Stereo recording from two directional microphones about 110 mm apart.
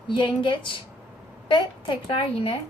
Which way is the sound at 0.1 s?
50° left (ahead or behind).